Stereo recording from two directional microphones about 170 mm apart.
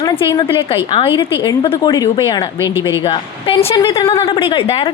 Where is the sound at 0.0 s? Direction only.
30° left (ahead or behind).